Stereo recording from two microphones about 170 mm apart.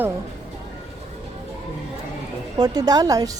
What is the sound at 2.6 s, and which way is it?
Speech, 25° right (ahead or behind).